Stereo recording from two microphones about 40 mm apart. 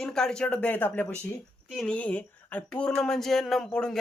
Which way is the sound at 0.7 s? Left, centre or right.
Left.